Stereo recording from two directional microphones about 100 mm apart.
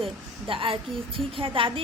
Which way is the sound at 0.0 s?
65° right (ahead or behind).